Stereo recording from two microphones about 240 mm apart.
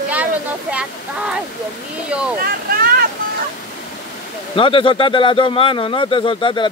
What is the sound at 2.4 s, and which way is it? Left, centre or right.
Speech, right.